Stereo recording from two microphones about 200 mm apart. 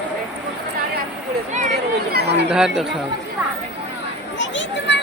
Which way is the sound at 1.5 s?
40° right (ahead or behind).